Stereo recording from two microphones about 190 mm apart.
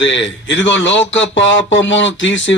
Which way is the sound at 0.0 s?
70° left (ahead or behind).